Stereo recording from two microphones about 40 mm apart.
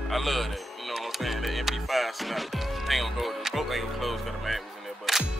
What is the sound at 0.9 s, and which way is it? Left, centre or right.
Music, centre.